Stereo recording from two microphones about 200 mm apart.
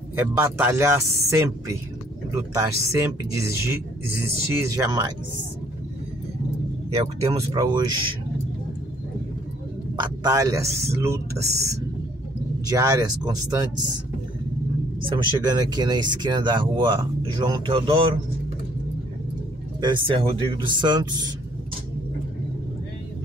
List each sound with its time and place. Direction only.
0.1 s speech: 10° right (ahead or behind)
7.2 s speech: 20° right (ahead or behind)
9.9 s speech: 20° right (ahead or behind)
15.0 s speech: 20° right (ahead or behind)
19.8 s speech: 25° right (ahead or behind)